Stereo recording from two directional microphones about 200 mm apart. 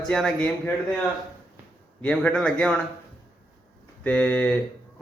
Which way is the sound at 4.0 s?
5° left (ahead or behind).